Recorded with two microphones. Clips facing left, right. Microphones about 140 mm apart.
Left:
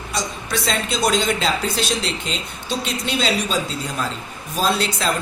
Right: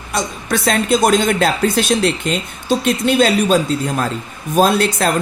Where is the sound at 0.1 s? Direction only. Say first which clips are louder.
Right 6 dB; 50° right (ahead or behind).